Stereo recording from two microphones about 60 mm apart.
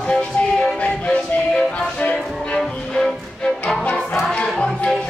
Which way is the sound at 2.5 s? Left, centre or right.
Centre.